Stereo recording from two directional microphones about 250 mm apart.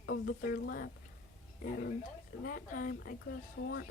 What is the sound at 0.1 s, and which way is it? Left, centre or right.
Speech, left.